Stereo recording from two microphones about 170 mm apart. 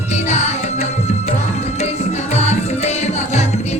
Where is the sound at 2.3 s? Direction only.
40° left (ahead or behind).